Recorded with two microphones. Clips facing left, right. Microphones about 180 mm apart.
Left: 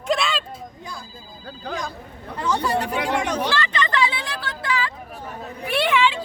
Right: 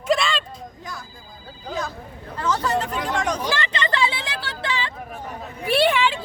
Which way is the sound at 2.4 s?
10° left (ahead or behind).